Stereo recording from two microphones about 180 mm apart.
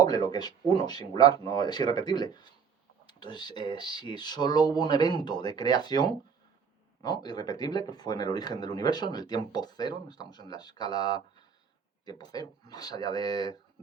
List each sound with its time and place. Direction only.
0.0 s speech: 20° left (ahead or behind)